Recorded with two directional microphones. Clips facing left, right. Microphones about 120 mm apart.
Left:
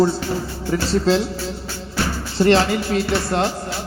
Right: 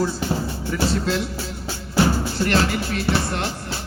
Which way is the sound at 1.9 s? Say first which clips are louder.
Right 5 dB; 20° right (ahead or behind).